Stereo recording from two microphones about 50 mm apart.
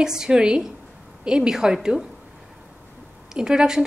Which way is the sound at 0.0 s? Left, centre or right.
Centre.